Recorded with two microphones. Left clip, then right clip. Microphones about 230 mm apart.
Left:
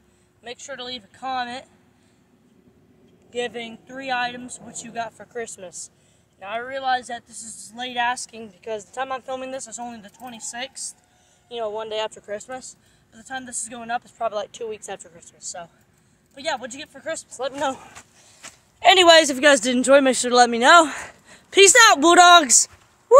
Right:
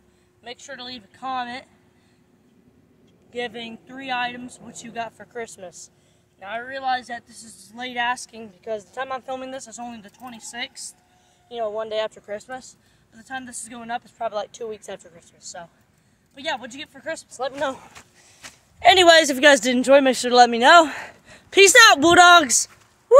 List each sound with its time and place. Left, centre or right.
0.4 s speech: centre
3.3 s speech: centre
18.4 s a sound: centre
19.4 s speech: centre
19.8 s a man's voice: centre
22.1 s speech: centre